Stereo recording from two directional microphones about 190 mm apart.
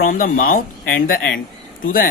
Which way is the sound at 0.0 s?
45° left (ahead or behind).